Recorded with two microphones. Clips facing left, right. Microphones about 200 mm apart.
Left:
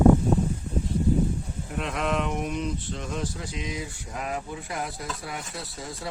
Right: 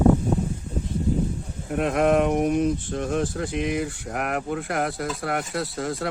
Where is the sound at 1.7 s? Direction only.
55° right (ahead or behind).